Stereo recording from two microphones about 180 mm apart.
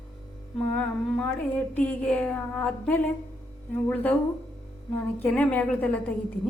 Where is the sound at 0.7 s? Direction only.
5° left (ahead or behind).